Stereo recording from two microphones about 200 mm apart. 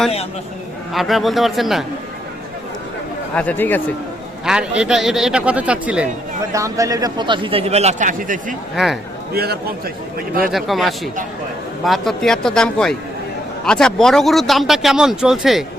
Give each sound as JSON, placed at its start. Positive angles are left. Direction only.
{"t": 0.9, "sound": "speech", "side_deg": 0}
{"t": 3.3, "sound": "speech", "side_deg": 10}
{"t": 4.4, "sound": "speech", "side_deg": -5}
{"t": 6.5, "sound": "a man's voice", "side_deg": -15}
{"t": 8.7, "sound": "speech", "side_deg": 0}
{"t": 9.3, "sound": "a man's voice", "side_deg": -50}
{"t": 10.5, "sound": "speech", "side_deg": 0}